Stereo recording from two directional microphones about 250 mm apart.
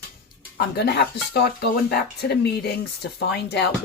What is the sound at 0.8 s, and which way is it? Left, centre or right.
Speech, left.